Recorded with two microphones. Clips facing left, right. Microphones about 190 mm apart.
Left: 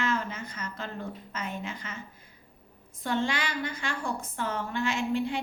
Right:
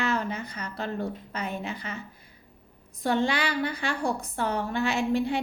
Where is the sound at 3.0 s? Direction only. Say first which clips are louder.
Right 4 dB; 35° right (ahead or behind).